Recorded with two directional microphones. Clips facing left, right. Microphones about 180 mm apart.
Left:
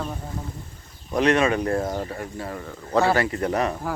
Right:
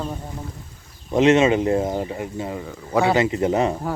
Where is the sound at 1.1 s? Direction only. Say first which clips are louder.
Right 4 dB; 25° right (ahead or behind).